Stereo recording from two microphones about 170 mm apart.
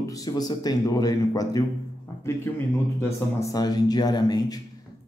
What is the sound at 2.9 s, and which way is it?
Speech, 15° left (ahead or behind).